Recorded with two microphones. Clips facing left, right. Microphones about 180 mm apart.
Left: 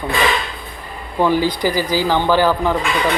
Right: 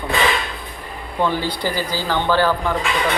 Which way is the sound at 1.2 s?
10° left (ahead or behind).